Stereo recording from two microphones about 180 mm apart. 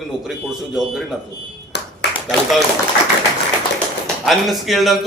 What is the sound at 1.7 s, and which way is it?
Clapping, 70° left (ahead or behind).